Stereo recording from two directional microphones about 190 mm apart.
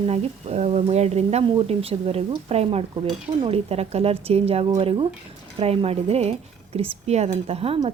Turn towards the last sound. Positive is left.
turn(degrees=-30)  # may be behind; listen again after turning